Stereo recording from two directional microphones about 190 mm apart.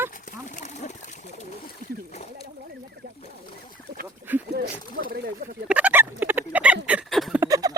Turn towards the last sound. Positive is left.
turn(degrees=-20)  # may be behind; listen again after turning